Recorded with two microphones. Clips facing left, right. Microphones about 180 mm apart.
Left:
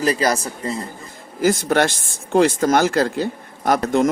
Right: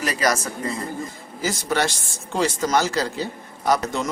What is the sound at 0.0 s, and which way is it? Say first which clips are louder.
Speech: left 4 dB; 30° left (ahead or behind).